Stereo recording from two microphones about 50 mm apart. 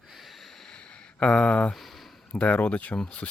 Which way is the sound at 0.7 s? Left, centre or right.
Centre.